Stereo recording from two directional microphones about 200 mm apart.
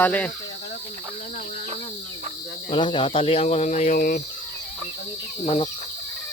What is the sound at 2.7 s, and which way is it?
Speech, 25° left (ahead or behind).